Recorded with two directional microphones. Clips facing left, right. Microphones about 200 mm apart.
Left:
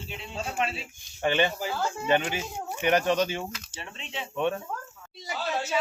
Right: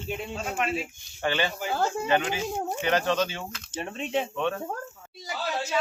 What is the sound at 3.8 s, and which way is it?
Speech, 50° right (ahead or behind).